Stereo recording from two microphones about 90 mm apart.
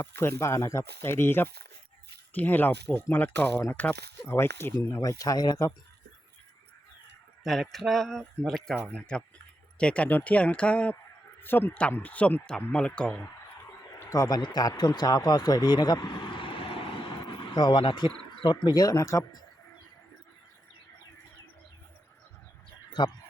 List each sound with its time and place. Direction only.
0.0 s speech: 30° left (ahead or behind)
5.0 s speech: 40° left (ahead or behind)
7.4 s speech: centre (ahead or behind)
11.3 s speech: 25° left (ahead or behind)
14.0 s speech: 35° left (ahead or behind)
23.0 s a man's voice: 55° left (ahead or behind)